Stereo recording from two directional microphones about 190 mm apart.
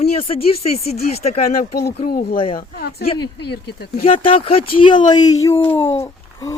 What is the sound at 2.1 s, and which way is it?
Speech, 50° left (ahead or behind).